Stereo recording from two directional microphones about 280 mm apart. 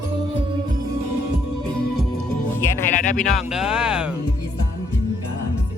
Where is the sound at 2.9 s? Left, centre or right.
Left.